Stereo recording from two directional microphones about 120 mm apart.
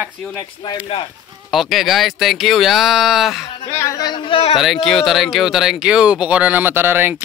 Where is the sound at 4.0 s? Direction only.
35° left (ahead or behind).